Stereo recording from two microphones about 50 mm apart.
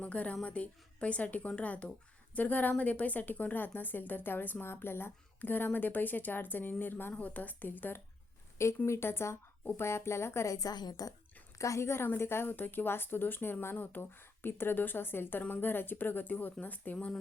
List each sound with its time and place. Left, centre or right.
0.0 s a woman's voice: left
5.4 s speech: left
8.9 s a woman's voice: left
11.5 s a woman's voice: left
12.0 s speech: left